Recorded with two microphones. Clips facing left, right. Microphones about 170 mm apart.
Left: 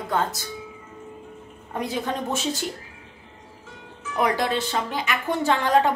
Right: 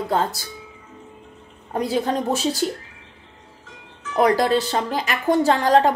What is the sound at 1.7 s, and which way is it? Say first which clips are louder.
Speech: right 5 dB; 35° right (ahead or behind).